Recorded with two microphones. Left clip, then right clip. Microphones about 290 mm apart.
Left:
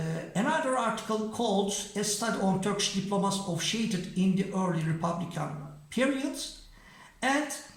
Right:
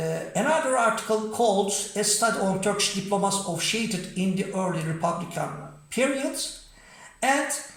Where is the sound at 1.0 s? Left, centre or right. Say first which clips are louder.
Right 7 dB; centre.